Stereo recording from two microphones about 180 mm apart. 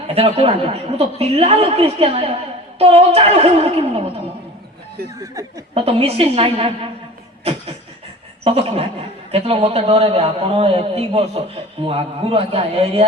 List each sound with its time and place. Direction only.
0.1 s a man's voice: 35° right (ahead or behind)
5.2 s speech: 20° right (ahead or behind)
5.7 s a man's voice: 35° right (ahead or behind)
8.4 s a man's voice: 35° right (ahead or behind)